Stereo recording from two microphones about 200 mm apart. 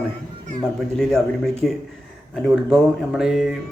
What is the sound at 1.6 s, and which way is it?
A man's voice, centre (ahead or behind).